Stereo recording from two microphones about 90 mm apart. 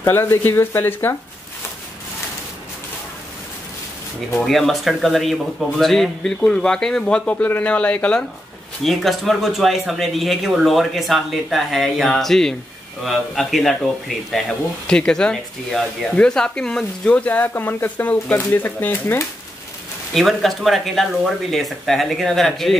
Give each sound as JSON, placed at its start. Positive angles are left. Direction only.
{"t": 0.0, "sound": "speech", "side_deg": 25}
{"t": 4.3, "sound": "speech", "side_deg": 0}
{"t": 8.8, "sound": "speech", "side_deg": 0}
{"t": 20.2, "sound": "speech", "side_deg": 0}